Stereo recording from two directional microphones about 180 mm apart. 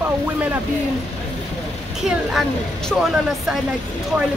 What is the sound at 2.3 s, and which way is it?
Speech, centre (ahead or behind).